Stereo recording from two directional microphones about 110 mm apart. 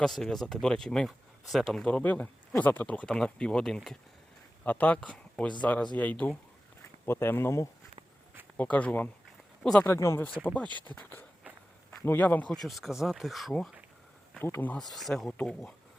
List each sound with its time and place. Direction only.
0.0 s speech: 5° left (ahead or behind)
4.6 s speech: 15° left (ahead or behind)
8.5 s speech: 15° left (ahead or behind)
10.4 s a man's voice: 10° left (ahead or behind)
12.6 s speech: centre (ahead or behind)
14.4 s speech: 20° left (ahead or behind)
14.8 s speech: centre (ahead or behind)